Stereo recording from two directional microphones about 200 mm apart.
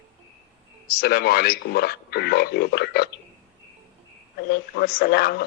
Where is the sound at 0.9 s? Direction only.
50° left (ahead or behind).